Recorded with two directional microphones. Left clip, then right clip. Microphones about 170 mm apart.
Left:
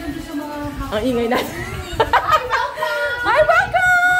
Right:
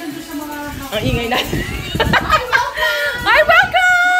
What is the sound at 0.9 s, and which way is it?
Speech, 30° left (ahead or behind).